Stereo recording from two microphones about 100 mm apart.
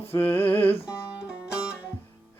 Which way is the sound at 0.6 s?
70° left (ahead or behind).